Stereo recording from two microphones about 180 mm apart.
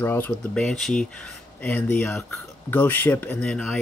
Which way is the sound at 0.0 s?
10° left (ahead or behind).